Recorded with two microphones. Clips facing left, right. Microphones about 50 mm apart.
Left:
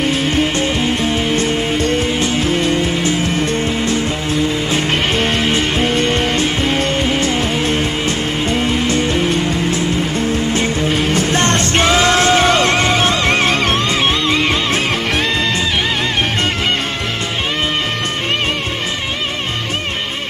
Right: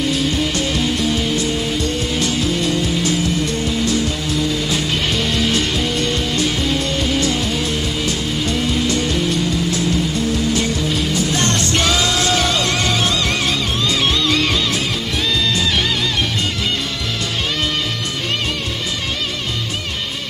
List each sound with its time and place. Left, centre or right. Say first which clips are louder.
0.0 s music: left 3 dB; left
14.2 s music: left 2 dB; left